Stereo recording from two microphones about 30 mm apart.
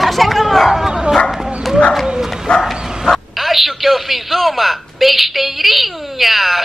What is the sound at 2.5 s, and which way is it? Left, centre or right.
Bow-wow, left.